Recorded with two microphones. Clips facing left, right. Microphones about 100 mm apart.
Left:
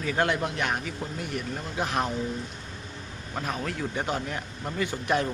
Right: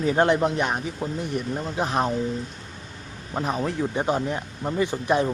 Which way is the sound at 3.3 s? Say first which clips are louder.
Right 6 dB; 25° right (ahead or behind).